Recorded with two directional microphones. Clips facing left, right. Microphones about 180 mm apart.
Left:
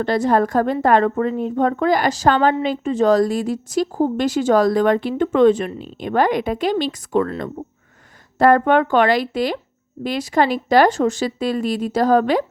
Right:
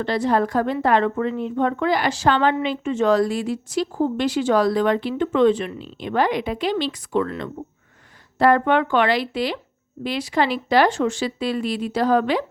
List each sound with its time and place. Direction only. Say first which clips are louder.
0.0 s a woman's voice: left 3 dB; 45° left (ahead or behind)